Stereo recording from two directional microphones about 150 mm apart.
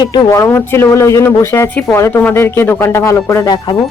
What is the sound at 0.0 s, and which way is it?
Speech, 30° left (ahead or behind).